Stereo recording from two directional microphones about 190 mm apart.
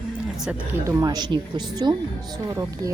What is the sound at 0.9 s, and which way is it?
Speech, 20° right (ahead or behind).